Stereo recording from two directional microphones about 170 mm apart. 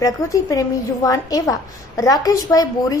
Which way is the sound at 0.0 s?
20° left (ahead or behind).